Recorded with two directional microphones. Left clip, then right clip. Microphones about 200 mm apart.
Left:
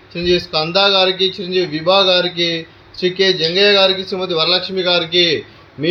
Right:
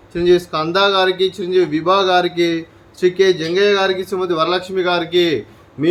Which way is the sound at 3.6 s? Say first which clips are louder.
Left 4 dB; 15° right (ahead or behind).